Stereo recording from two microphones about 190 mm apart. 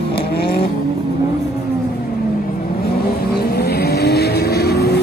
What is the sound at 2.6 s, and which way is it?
Vehicle, 50° left (ahead or behind).